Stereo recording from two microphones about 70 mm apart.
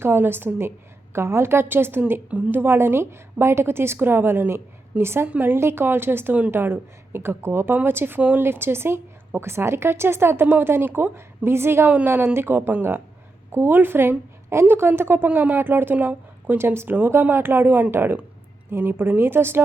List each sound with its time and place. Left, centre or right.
0.0 s a woman's voice: right